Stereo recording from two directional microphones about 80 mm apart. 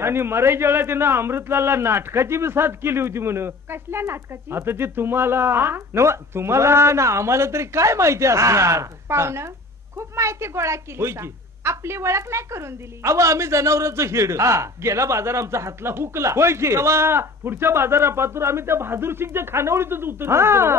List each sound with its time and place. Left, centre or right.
0.0 s a woman's voice: right